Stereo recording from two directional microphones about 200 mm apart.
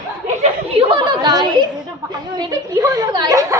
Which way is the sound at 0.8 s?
25° right (ahead or behind).